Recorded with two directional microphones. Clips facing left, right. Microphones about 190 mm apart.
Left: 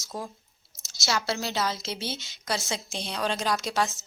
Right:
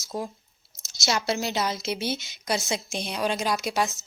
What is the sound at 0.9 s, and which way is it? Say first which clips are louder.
Speech: right 3 dB; 20° right (ahead or behind).